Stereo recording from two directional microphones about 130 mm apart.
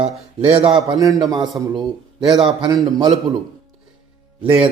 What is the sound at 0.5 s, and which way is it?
Speech, 40° right (ahead or behind).